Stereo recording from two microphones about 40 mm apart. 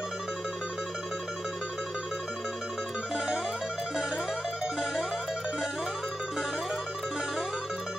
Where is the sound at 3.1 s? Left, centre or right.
Right.